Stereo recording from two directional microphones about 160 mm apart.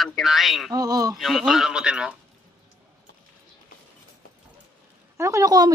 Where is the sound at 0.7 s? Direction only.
20° right (ahead or behind).